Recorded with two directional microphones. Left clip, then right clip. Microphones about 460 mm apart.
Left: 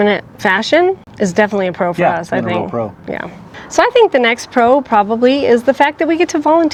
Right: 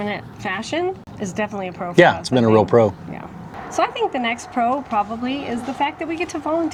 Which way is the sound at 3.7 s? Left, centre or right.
Left.